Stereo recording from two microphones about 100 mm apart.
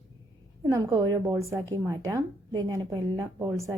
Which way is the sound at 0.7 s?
35° right (ahead or behind).